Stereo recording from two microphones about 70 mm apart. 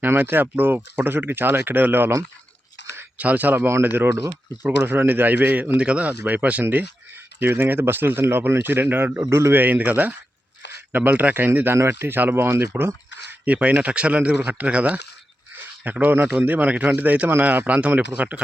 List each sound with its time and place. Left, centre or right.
0.0 s speech: right
3.2 s speech: right
5.8 s speech: centre
9.3 s a man's voice: right
9.6 s speech: right
13.4 s speech: centre
15.5 s a sound: right
16.3 s speech: right